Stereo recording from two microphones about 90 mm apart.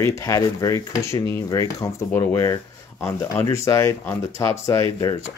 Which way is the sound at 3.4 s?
35° left (ahead or behind).